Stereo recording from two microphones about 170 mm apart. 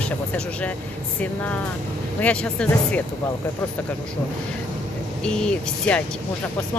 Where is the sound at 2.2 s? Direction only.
5° left (ahead or behind).